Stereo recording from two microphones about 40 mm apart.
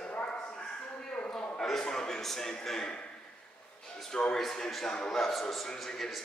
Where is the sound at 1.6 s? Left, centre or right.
Centre.